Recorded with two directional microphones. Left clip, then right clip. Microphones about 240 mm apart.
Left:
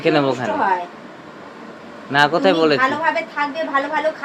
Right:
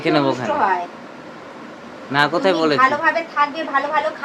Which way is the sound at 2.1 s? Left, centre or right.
Centre.